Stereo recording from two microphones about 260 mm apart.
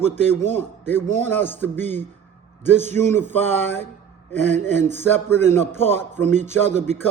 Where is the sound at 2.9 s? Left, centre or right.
Centre.